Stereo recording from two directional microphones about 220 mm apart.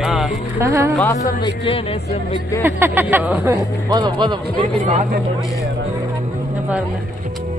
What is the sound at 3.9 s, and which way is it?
Speech, 20° right (ahead or behind).